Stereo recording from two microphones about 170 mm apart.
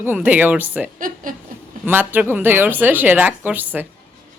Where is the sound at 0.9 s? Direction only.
55° right (ahead or behind).